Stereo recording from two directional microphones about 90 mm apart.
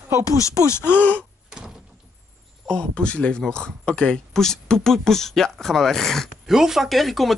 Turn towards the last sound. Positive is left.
turn(degrees=0)  # may be behind; listen again after turning